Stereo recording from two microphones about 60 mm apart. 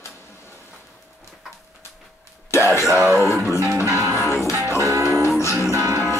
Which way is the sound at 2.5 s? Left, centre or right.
Left.